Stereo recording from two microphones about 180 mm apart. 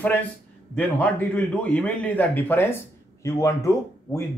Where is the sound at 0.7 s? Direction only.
10° left (ahead or behind).